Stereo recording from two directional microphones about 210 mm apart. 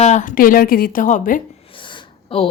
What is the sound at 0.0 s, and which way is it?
Speech, 35° left (ahead or behind).